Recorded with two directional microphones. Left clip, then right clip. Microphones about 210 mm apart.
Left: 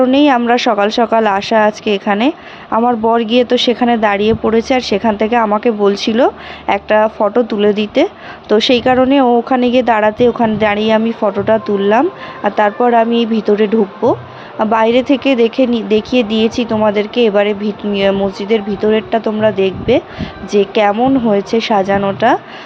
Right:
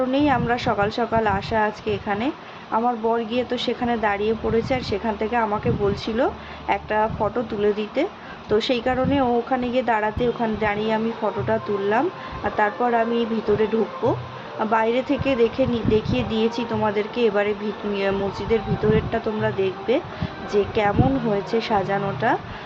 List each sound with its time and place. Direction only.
0.0 s speech: 45° left (ahead or behind)